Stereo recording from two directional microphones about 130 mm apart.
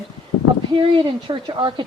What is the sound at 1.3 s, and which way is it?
Speech, 40° right (ahead or behind).